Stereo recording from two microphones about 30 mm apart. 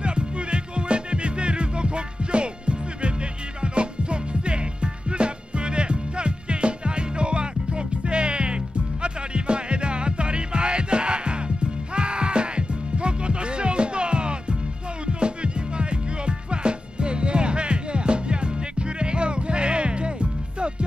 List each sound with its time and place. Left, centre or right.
0.0 s music: right